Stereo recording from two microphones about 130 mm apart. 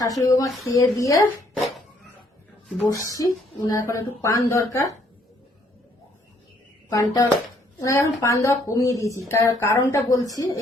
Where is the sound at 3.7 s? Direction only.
25° left (ahead or behind).